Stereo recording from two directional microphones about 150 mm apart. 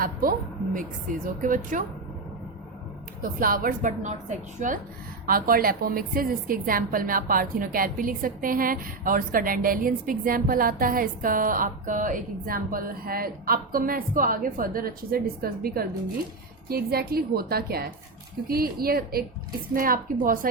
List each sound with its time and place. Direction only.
0.0 s a woman's voice: 70° right (ahead or behind)
3.4 s a woman's voice: 70° right (ahead or behind)
5.2 s a woman's voice: 75° right (ahead or behind); by 19.2 s 90° right
19.7 s a woman's voice: 70° right (ahead or behind)